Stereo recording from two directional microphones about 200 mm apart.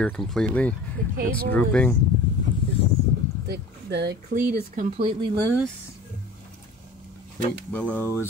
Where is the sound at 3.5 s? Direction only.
60° right (ahead or behind).